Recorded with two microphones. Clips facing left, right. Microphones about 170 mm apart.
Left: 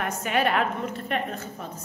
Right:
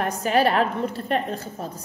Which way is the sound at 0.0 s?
35° right (ahead or behind).